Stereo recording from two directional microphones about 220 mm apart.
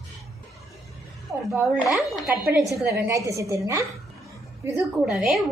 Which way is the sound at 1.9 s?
Centre (ahead or behind).